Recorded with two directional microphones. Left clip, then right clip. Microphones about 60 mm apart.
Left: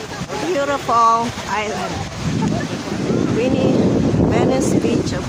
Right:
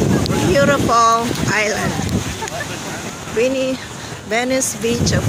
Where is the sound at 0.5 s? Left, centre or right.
Right.